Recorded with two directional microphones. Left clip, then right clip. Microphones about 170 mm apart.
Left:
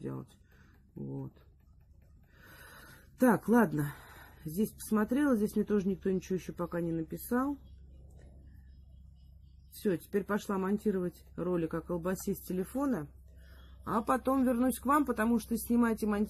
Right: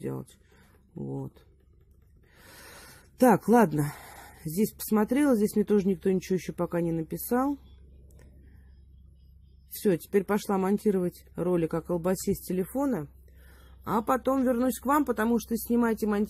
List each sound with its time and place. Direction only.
3.2 s speech: 40° right (ahead or behind)
9.8 s speech: 40° right (ahead or behind)